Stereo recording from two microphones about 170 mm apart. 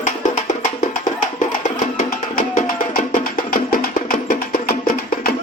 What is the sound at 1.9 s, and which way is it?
Music, 50° left (ahead or behind).